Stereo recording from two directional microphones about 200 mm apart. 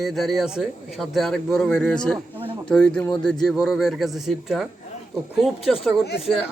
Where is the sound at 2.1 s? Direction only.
25° right (ahead or behind).